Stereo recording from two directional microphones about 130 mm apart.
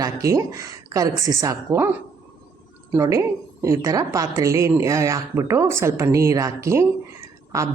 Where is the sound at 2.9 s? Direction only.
25° right (ahead or behind).